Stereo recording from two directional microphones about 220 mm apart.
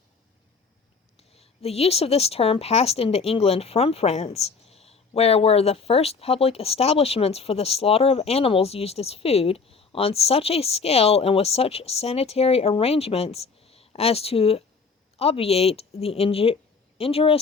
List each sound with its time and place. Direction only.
1.3 s a woman's voice: 25° left (ahead or behind)